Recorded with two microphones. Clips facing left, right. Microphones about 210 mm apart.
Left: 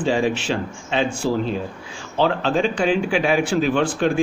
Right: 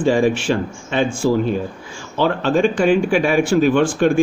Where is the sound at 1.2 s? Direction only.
10° right (ahead or behind).